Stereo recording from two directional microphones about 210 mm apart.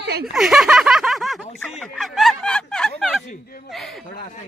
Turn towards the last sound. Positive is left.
turn(degrees=0)  # may be behind; listen again after turning